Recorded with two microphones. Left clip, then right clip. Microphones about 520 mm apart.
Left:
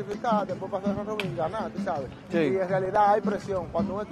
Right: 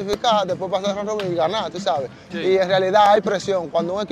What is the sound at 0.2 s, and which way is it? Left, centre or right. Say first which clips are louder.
Speech: right 7 dB; right.